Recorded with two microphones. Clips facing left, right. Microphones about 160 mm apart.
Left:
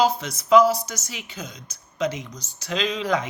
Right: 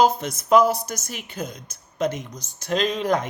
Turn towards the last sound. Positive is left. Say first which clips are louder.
# right 2 dB
turn(degrees=-50)  # may be behind; listen again after turning